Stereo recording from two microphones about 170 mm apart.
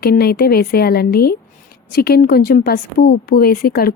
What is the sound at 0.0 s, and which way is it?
Speech, 65° left (ahead or behind).